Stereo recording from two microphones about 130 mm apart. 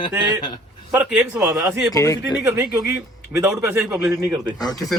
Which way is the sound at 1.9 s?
25° left (ahead or behind).